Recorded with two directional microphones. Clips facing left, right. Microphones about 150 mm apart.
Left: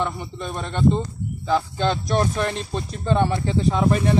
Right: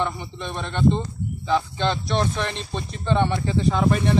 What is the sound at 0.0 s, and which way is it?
Speech, centre (ahead or behind).